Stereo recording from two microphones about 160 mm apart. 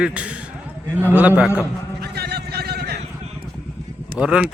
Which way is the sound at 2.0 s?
90° right.